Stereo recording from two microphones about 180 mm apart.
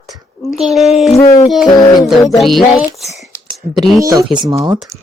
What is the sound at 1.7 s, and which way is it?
Music, 25° left (ahead or behind).